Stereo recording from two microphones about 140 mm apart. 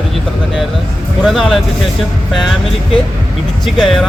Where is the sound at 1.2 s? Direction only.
Centre (ahead or behind).